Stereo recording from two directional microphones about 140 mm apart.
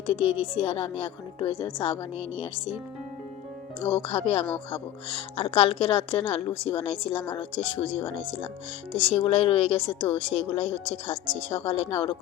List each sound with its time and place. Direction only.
0.1 s a woman's voice: 40° left (ahead or behind)
1.8 s a woman's voice: 45° left (ahead or behind)
3.8 s a woman's voice: 40° left (ahead or behind)